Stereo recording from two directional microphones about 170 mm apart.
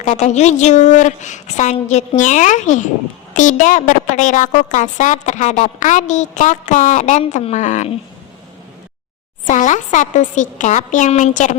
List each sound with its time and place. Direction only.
0.0 s a woman's voice: 45° left (ahead or behind)
9.5 s a woman's voice: 50° left (ahead or behind)